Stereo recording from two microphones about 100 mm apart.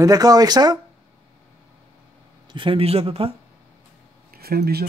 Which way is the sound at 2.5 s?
60° right (ahead or behind).